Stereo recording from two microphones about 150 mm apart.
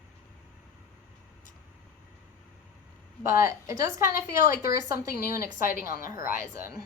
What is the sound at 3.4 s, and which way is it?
Speech, 20° right (ahead or behind).